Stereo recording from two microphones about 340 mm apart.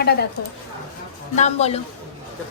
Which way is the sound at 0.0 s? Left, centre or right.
Left.